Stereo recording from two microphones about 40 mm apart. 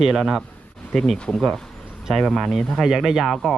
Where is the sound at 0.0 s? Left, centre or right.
Centre.